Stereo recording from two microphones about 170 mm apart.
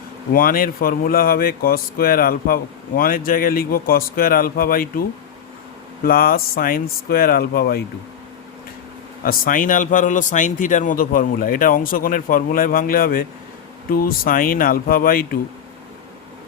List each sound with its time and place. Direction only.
0.3 s speech: 55° left (ahead or behind)
6.1 s speech: 60° left (ahead or behind)
9.2 s speech: 55° left (ahead or behind)